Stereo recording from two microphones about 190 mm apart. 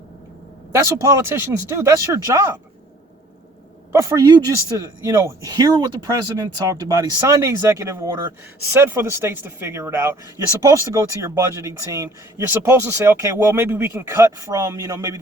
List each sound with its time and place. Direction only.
0.7 s speech: 15° right (ahead or behind)
3.9 s speech: 15° right (ahead or behind)